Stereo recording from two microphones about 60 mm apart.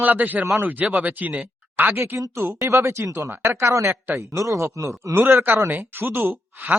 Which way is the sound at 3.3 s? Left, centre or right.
Right.